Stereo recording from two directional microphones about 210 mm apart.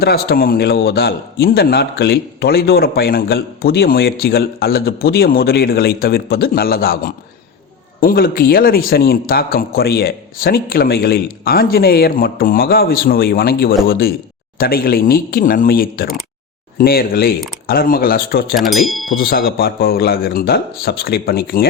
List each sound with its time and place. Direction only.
0.0 s speech: 50° left (ahead or behind)
18.5 s speech: centre (ahead or behind)
19.1 s speech: 45° left (ahead or behind)